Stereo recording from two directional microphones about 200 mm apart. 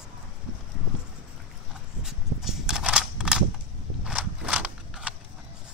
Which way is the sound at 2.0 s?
Centre (ahead or behind).